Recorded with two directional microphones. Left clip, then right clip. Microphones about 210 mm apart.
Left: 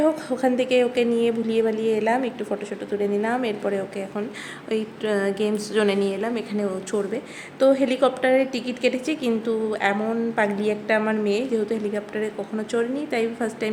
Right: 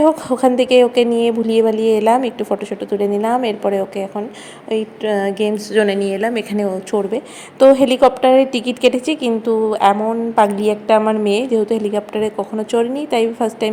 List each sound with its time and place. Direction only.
0.0 s a woman's voice: 20° right (ahead or behind)